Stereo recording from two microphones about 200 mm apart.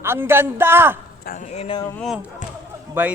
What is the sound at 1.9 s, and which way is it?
Speech, centre (ahead or behind).